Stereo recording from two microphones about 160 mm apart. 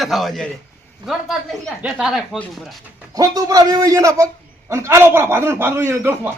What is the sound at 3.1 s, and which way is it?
A man's voice, 20° right (ahead or behind).